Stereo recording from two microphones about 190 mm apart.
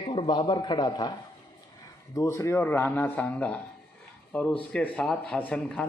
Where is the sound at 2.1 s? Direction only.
15° left (ahead or behind).